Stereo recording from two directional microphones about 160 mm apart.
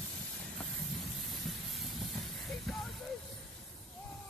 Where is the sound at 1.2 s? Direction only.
Centre (ahead or behind).